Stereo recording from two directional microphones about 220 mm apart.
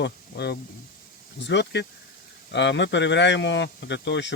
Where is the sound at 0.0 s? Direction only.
50° left (ahead or behind).